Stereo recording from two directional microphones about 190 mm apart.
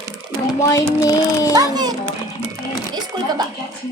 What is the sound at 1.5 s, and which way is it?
Speech, 20° right (ahead or behind).